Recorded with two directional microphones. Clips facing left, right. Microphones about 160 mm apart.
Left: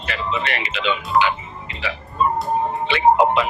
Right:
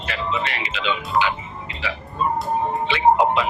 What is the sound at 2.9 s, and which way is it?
Speech, 60° left (ahead or behind).